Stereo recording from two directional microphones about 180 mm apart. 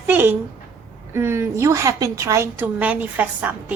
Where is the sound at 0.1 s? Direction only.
10° right (ahead or behind).